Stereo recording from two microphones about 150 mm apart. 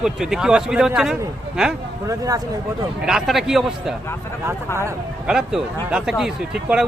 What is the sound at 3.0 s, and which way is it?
Speech, centre (ahead or behind).